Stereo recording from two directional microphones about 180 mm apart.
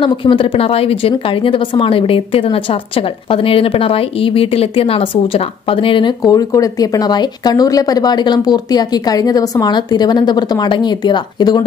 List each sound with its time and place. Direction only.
0.0 s speech: 30° left (ahead or behind)